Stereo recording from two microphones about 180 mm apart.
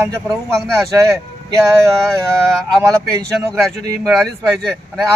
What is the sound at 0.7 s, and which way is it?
Speech, 15° right (ahead or behind).